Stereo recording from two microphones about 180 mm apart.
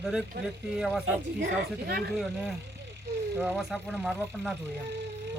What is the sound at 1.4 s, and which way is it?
Speech, 65° right (ahead or behind).